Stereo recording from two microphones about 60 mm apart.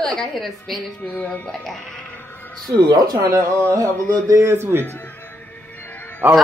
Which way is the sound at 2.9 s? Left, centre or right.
Right.